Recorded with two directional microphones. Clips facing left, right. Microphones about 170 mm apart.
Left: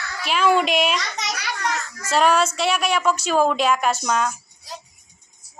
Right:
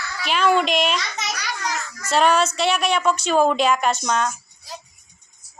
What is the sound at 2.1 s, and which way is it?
A woman's voice, 5° left (ahead or behind).